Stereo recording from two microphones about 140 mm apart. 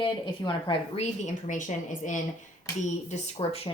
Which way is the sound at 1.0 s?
60° left (ahead or behind).